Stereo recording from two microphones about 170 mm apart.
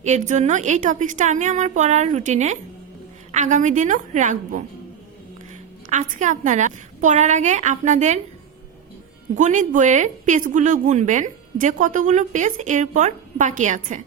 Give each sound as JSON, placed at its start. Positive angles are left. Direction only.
{"t": 0.0, "sound": "a woman's voice", "side_deg": -45}
{"t": 5.9, "sound": "a woman's voice", "side_deg": -45}
{"t": 9.3, "sound": "a woman's voice", "side_deg": -45}